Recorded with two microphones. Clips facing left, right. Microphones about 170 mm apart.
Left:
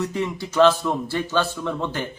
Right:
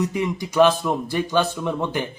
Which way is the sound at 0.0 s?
15° right (ahead or behind).